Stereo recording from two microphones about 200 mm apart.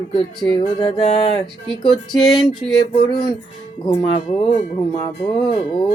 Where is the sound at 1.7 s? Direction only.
Centre (ahead or behind).